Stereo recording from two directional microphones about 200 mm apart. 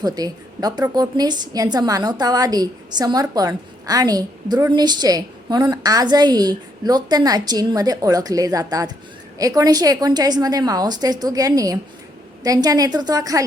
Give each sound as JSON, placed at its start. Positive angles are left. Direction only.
{"t": 0.0, "sound": "a woman's voice", "side_deg": -20}